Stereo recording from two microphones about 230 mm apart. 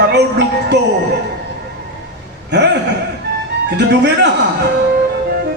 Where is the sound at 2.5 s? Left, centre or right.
Right.